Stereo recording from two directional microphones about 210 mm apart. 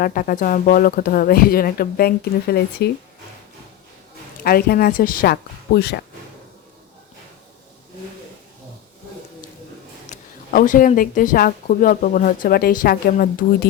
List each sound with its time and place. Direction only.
0.0 s speech: 40° left (ahead or behind)
4.4 s speech: 45° left (ahead or behind)
10.1 s a woman's voice: 40° left (ahead or behind)